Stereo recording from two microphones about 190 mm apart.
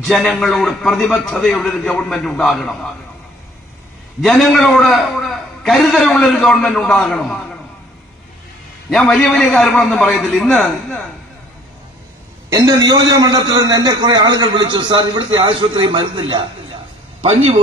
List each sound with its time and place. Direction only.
0.0 s a man's voice: 5° left (ahead or behind)
4.2 s a man's voice: centre (ahead or behind)
8.9 s a man's voice: centre (ahead or behind)
12.4 s a man's voice: 15° right (ahead or behind)